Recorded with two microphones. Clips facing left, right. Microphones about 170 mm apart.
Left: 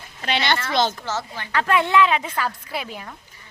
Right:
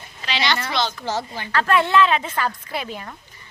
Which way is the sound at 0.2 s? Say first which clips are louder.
Left 1 dB; 55° left (ahead or behind).